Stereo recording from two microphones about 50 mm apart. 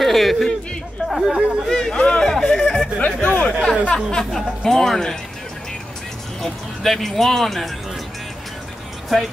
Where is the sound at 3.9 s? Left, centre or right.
Centre.